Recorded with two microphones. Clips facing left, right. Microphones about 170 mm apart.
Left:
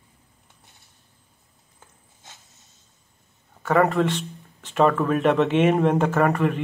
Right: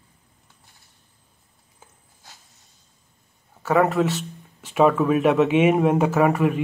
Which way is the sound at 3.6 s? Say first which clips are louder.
Even; 5° right (ahead or behind).